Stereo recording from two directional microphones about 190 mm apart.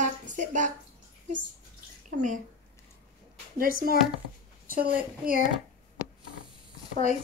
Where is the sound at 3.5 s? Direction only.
50° right (ahead or behind).